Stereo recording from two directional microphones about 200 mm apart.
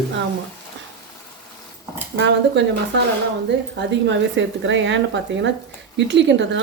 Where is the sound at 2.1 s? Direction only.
60° right (ahead or behind).